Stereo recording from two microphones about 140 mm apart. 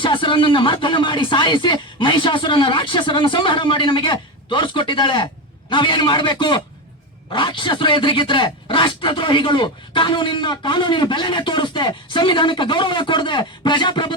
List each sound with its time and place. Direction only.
0.0 s speech: 35° left (ahead or behind)